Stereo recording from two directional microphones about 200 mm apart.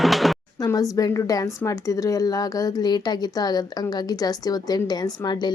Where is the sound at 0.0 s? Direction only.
Centre (ahead or behind).